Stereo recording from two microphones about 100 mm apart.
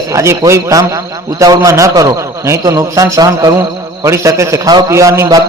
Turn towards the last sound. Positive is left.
turn(degrees=-35)  # may be behind; listen again after turning